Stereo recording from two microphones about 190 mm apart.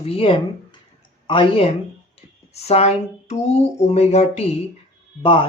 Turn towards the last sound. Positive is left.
turn(degrees=25)  # may be behind; listen again after turning